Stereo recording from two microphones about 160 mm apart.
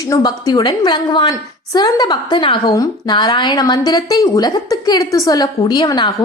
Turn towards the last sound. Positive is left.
turn(degrees=25)  # may be behind; listen again after turning